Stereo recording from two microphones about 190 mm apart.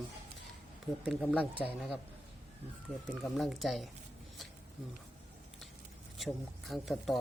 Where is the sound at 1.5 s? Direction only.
10° right (ahead or behind).